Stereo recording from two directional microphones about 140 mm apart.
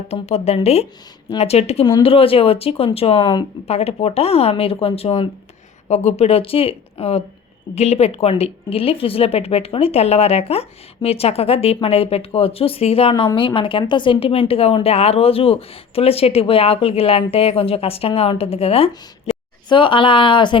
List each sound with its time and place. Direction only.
0.1 s speech: 50° left (ahead or behind); by 20.6 s 35° left (ahead or behind)